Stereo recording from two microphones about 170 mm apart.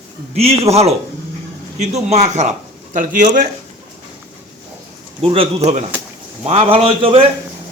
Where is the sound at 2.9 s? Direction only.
55° right (ahead or behind).